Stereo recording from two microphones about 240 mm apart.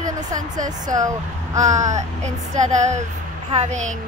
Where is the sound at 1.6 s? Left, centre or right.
Right.